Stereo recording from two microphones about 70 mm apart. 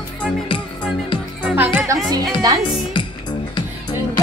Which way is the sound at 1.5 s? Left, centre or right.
Right.